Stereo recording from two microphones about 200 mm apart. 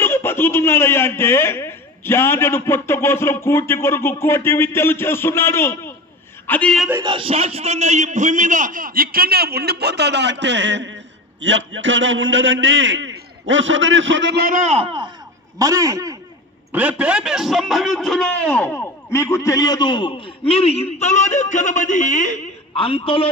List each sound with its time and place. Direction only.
0.0 s a man's voice: 10° left (ahead or behind)
7.0 s a man's voice: 25° right (ahead or behind); by 14.4 s 65° right (ahead or behind)
14.4 s a man's voice: 40° right (ahead or behind)
15.6 s a man's voice: 15° right (ahead or behind)
16.7 s a man's voice: 5° right (ahead or behind); by 23.3 s 30° left (ahead or behind)